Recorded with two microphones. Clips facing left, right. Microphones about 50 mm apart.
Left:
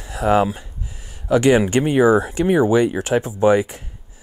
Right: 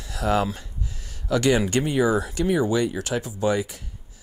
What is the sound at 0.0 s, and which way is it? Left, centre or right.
Speech, left.